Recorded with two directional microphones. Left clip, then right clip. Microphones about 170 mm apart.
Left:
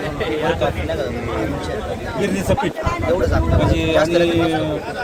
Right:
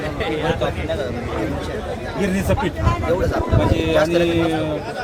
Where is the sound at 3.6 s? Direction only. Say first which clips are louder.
Left 1 dB; 5° left (ahead or behind).